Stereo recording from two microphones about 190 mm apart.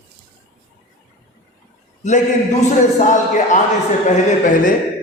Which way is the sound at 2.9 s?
40° left (ahead or behind).